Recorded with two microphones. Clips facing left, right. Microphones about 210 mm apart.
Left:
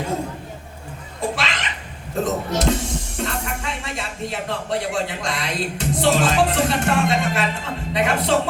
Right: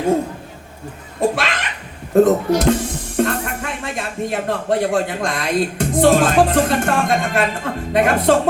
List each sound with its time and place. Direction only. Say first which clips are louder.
1.4 s laughter: right 4 dB; 55° right (ahead or behind)
2.1 s speech: right 10 dB; 55° right (ahead or behind)